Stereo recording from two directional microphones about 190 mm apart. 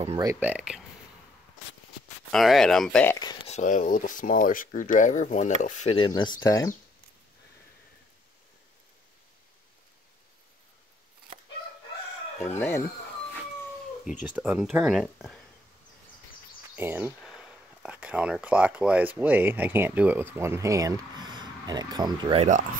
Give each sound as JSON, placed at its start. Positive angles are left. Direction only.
{"t": 0.2, "sound": "speech", "side_deg": -15}
{"t": 2.3, "sound": "speech", "side_deg": 0}
{"t": 3.4, "sound": "speech", "side_deg": 40}
{"t": 12.4, "sound": "speech", "side_deg": 10}
{"t": 14.0, "sound": "speech", "side_deg": -10}
{"t": 16.7, "sound": "speech", "side_deg": -10}